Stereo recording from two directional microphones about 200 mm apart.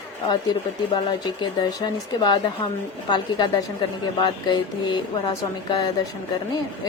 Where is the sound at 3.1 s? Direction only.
20° left (ahead or behind).